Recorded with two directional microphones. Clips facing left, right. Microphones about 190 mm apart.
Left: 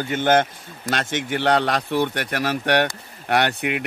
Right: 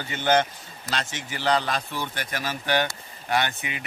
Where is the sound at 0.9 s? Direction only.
60° left (ahead or behind).